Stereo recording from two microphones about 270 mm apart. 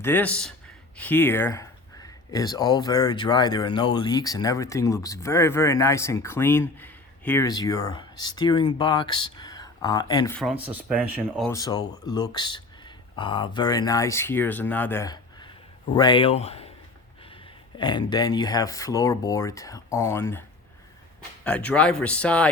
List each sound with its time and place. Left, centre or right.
0.0 s speech: centre
11.4 s speech: centre
17.7 s speech: centre
21.4 s speech: centre